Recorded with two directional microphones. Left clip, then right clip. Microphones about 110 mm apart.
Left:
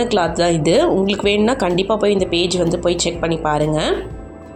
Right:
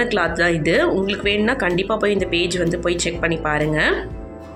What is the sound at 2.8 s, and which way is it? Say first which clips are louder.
Speech: left 2 dB; 40° left (ahead or behind).